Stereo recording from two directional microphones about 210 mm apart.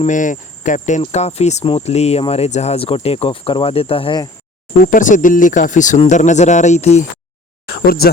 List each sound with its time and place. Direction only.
0.0 s speech: 35° left (ahead or behind)
4.8 s speech: 40° left (ahead or behind)
7.7 s speech: 45° left (ahead or behind)